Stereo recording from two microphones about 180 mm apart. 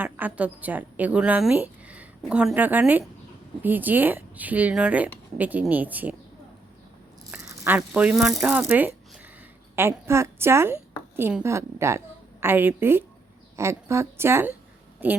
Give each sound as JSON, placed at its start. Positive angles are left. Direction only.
{"t": 0.0, "sound": "a woman's voice", "side_deg": -10}
{"t": 7.3, "sound": "a woman's voice", "side_deg": -5}